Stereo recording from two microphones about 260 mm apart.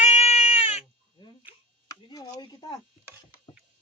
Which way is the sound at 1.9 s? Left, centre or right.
Centre.